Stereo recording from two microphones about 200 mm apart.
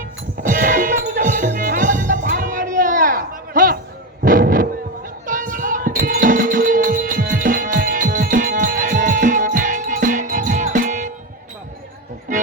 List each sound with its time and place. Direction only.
0.4 s music: 40° right (ahead or behind)
4.2 s artillery fire: 45° right (ahead or behind)
5.2 s music: 40° right (ahead or behind)